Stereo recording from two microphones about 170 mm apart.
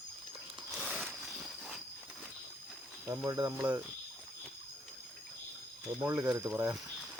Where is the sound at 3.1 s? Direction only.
10° right (ahead or behind).